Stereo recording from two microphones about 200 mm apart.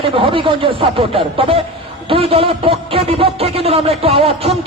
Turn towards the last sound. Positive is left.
turn(degrees=-30)  # may be behind; listen again after turning